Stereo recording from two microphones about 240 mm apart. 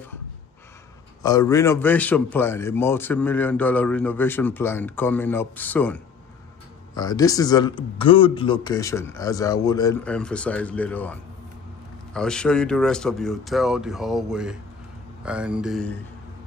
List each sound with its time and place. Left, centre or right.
1.2 s a man's voice: centre
7.0 s a man's voice: centre
10.0 s speech: centre